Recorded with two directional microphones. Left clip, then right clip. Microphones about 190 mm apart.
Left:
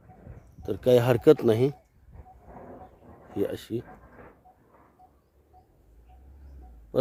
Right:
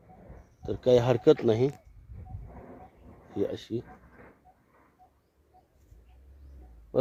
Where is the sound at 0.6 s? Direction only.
5° left (ahead or behind).